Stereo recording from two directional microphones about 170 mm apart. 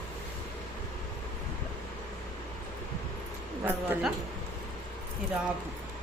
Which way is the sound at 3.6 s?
10° right (ahead or behind).